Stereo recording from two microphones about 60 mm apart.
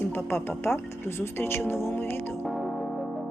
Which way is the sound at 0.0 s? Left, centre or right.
Left.